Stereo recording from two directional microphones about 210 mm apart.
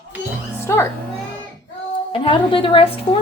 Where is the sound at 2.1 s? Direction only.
25° left (ahead or behind).